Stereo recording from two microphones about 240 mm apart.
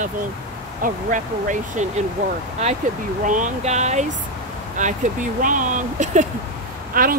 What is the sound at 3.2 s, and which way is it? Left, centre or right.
Speech, right.